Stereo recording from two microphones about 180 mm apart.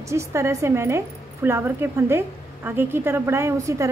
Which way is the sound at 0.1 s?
15° right (ahead or behind).